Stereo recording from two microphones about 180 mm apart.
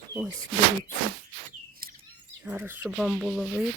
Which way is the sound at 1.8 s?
55° right (ahead or behind).